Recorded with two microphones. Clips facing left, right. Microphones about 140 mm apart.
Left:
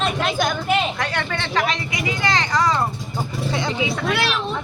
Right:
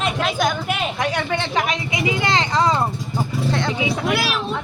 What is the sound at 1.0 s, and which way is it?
Speech, 15° right (ahead or behind).